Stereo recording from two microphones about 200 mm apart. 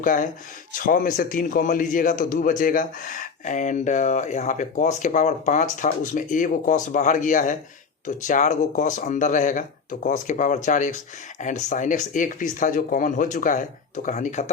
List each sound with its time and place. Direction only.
0.0 s a man's voice: 40° left (ahead or behind)